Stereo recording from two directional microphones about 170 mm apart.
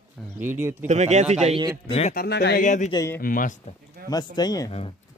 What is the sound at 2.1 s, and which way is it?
Speech, 75° left (ahead or behind).